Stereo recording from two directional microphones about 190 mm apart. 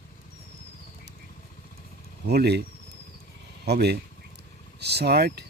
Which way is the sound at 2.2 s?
60° right (ahead or behind).